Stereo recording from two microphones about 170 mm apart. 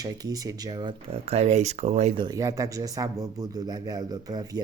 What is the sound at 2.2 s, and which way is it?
Speech, 20° right (ahead or behind).